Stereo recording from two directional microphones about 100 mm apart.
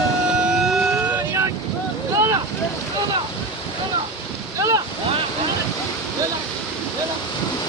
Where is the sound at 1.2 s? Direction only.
30° right (ahead or behind).